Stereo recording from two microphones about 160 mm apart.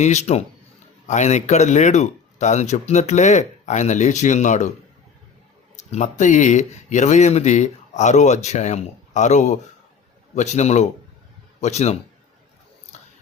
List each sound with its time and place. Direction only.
0.0 s speech: 45° left (ahead or behind)
5.7 s speech: 45° left (ahead or behind)
12.9 s a sound: 45° left (ahead or behind)